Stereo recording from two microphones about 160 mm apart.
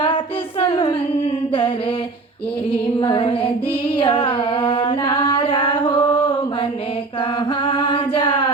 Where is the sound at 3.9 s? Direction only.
35° left (ahead or behind).